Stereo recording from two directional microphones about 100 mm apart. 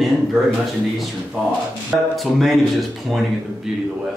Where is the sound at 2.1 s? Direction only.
Centre (ahead or behind).